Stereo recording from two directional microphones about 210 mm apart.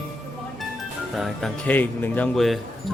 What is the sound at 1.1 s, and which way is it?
Speech, centre (ahead or behind).